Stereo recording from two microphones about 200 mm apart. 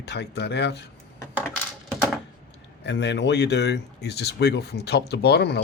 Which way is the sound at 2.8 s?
60° left (ahead or behind).